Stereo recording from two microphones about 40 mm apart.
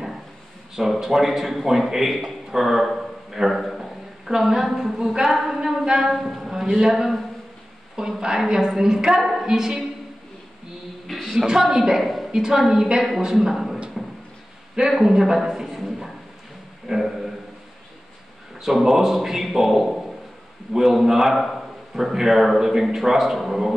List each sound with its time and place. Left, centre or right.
0.7 s a woman's voice: centre
11.2 s a woman's voice: centre
12.0 s a woman's voice: centre
12.3 s a woman's voice: centre
14.0 s a sound: centre
14.8 s a man's voice: centre
16.8 s a sound: centre
18.6 s a man's voice: centre